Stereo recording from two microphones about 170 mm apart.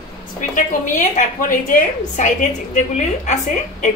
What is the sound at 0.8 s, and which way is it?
A woman's voice, 50° left (ahead or behind).